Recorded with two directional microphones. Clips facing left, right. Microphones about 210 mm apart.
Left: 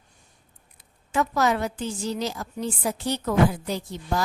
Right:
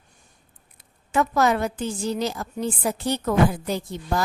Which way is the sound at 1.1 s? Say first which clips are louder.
Right 2 dB; 55° right (ahead or behind).